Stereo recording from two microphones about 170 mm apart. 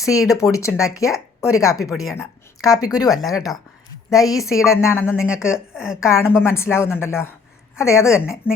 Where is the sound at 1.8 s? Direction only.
Centre (ahead or behind).